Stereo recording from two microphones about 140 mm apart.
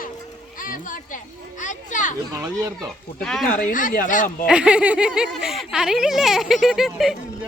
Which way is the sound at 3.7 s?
70° left (ahead or behind).